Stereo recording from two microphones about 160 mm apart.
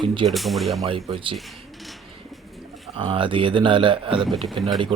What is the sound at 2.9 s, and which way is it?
Speech, 30° right (ahead or behind).